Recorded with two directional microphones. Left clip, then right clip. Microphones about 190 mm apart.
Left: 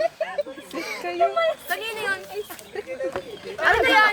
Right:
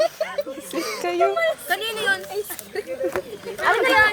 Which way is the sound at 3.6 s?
10° left (ahead or behind).